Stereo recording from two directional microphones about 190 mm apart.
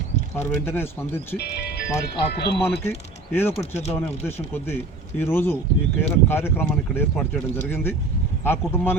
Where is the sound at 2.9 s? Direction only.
10° left (ahead or behind).